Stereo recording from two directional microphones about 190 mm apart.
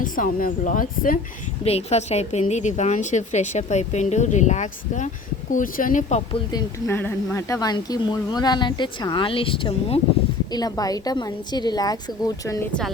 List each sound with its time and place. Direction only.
0.0 s a woman's voice: 45° left (ahead or behind)
1.6 s a woman's voice: 35° left (ahead or behind)
6.5 s speech: 15° left (ahead or behind)